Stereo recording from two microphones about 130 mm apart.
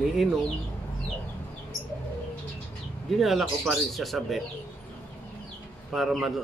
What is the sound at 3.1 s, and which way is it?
Speech, centre (ahead or behind).